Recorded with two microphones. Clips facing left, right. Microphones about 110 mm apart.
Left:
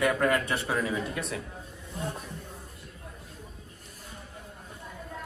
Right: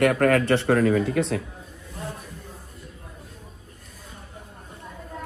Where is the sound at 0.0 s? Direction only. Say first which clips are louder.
Right 6 dB; 65° right (ahead or behind).